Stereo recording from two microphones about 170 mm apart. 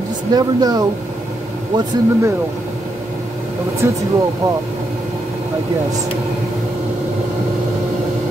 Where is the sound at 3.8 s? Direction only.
15° right (ahead or behind).